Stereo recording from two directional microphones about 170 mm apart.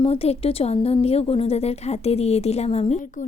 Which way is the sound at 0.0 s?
35° left (ahead or behind).